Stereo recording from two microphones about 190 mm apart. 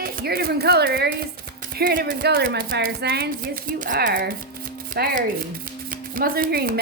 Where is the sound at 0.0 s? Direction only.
55° right (ahead or behind).